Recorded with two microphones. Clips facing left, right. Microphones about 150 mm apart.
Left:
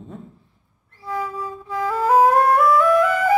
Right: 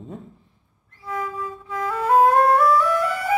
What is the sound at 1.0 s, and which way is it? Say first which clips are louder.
Music: left 2 dB; 35° left (ahead or behind).